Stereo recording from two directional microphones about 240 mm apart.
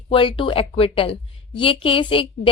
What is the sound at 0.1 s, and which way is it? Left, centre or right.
A woman's voice, left.